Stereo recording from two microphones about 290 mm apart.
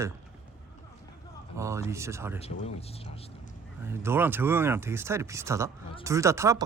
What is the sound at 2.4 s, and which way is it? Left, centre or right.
Speech, left.